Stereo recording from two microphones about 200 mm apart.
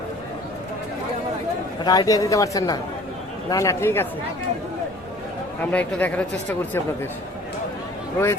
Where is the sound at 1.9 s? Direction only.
20° left (ahead or behind).